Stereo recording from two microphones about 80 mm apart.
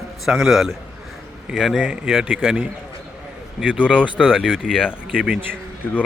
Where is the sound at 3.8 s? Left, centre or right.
Centre.